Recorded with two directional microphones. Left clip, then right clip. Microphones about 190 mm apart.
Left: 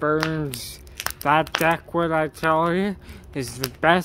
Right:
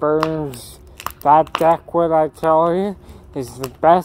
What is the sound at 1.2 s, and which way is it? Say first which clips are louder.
Speech: right 7 dB; 40° left (ahead or behind).